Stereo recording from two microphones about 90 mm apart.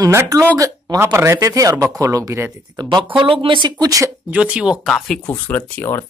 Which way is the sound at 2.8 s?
50° right (ahead or behind).